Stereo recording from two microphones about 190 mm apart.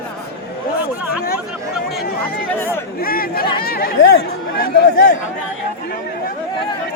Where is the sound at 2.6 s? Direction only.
10° left (ahead or behind).